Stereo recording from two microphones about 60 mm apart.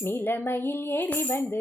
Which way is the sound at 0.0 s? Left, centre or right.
Left.